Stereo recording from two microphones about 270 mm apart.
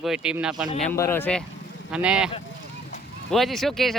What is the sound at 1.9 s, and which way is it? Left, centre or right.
Speech, centre.